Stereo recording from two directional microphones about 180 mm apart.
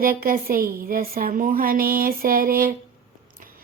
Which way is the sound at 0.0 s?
50° right (ahead or behind).